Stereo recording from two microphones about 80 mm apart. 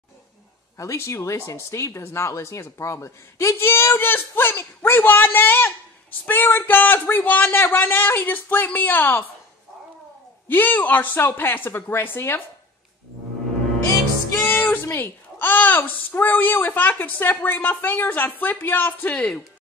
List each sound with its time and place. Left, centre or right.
0.7 s a woman's voice: left
10.5 s a woman's voice: left
14.3 s music: left
14.7 s a woman's voice: left